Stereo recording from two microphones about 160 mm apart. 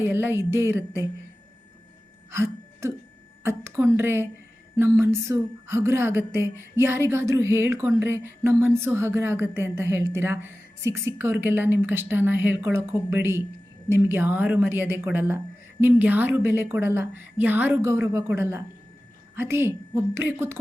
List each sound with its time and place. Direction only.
0.0 s speech: 15° right (ahead or behind)
2.3 s speech: 15° right (ahead or behind)